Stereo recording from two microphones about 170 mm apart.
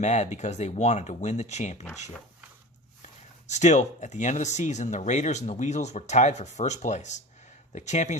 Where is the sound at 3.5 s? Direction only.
45° left (ahead or behind).